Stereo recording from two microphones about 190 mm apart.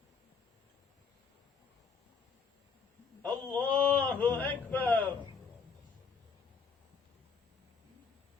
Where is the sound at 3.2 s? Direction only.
5° left (ahead or behind).